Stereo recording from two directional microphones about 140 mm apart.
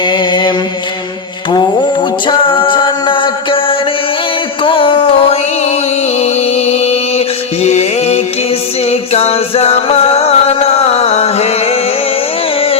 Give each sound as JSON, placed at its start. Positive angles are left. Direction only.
{"t": 0.0, "sound": "mantra", "side_deg": 35}
{"t": 1.5, "sound": "music", "side_deg": 35}
{"t": 6.1, "sound": "mantra", "side_deg": 50}
{"t": 8.9, "sound": "music", "side_deg": 50}